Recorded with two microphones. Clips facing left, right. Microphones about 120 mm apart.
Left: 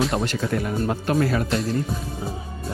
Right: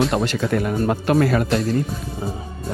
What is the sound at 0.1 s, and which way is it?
Speech, 80° right.